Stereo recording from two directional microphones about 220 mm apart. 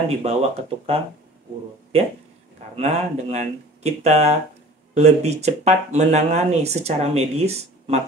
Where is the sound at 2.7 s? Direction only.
30° right (ahead or behind).